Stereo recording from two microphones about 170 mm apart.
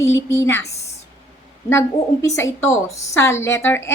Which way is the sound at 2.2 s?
15° left (ahead or behind).